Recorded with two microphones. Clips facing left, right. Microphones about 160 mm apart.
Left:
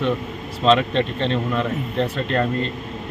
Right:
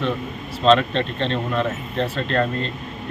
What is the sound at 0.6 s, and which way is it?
Speech, 15° left (ahead or behind).